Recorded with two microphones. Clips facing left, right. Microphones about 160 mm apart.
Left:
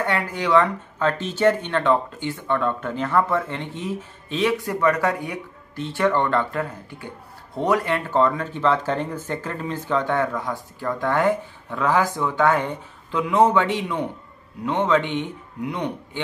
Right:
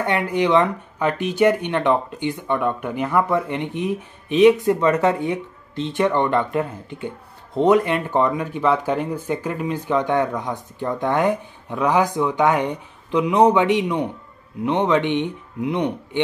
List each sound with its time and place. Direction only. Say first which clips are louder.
0.0 s a man's voice: right 4 dB; 20° right (ahead or behind)